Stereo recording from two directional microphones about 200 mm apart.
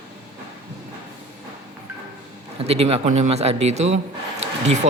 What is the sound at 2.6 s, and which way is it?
Speech, 30° right (ahead or behind).